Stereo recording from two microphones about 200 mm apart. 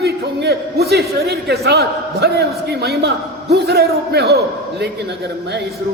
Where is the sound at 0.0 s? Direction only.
55° right (ahead or behind).